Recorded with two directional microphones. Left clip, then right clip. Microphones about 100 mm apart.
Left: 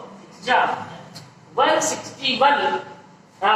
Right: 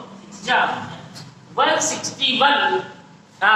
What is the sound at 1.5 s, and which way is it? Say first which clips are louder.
Speech: even; 20° right (ahead or behind).